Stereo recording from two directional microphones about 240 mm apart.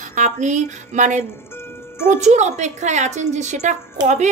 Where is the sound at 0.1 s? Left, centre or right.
Right.